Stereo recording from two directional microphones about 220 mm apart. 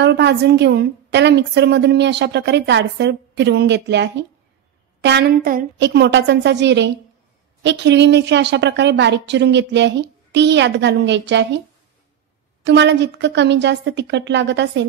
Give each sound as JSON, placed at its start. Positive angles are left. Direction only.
{"t": 0.0, "sound": "a woman's voice", "side_deg": -50}
{"t": 12.6, "sound": "a woman's voice", "side_deg": -50}